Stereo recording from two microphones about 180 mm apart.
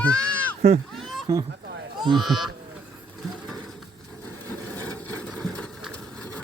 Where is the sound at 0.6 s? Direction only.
35° right (ahead or behind).